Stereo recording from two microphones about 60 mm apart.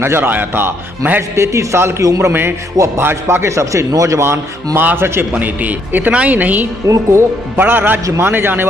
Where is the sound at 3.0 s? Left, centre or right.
Right.